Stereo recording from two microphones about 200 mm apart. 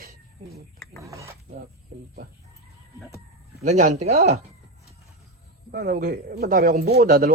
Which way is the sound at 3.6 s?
35° right (ahead or behind).